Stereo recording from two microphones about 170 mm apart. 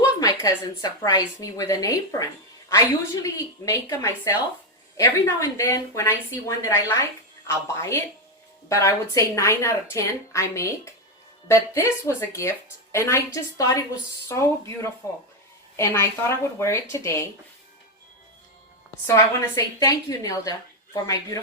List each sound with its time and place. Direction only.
0.2 s a woman's voice: 20° left (ahead or behind)
19.0 s a woman's voice: 20° left (ahead or behind)